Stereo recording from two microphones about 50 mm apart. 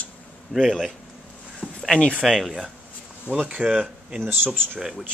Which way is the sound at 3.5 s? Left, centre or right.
Right.